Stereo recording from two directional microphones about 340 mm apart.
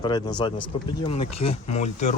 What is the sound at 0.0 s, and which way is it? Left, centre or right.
Speech, centre.